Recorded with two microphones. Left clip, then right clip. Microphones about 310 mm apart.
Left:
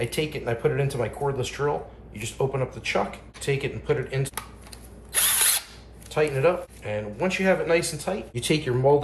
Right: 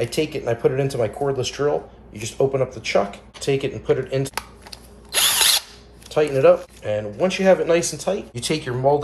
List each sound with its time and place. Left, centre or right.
0.0 s speech: centre
5.1 s drill: right
6.0 s speech: centre